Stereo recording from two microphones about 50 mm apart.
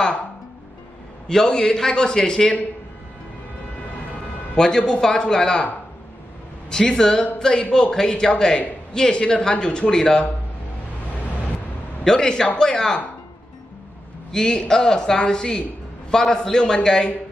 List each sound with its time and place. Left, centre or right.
1.3 s a man's voice: centre
4.6 s a man's voice: centre
6.7 s a man's voice: centre
12.0 s a man's voice: centre
14.3 s a man's voice: centre